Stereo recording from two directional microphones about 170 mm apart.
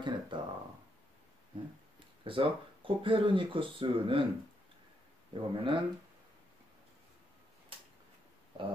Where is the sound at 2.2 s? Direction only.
30° right (ahead or behind).